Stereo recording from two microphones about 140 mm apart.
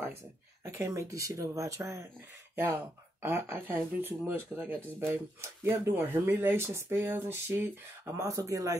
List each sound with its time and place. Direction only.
0.7 s speech: 20° right (ahead or behind)